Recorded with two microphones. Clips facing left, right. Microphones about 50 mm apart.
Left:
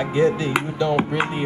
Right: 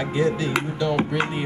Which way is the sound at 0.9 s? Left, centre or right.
Centre.